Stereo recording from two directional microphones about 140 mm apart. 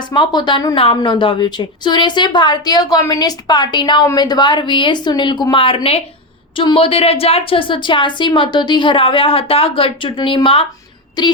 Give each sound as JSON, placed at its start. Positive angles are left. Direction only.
{"t": 0.1, "sound": "a woman's voice", "side_deg": 35}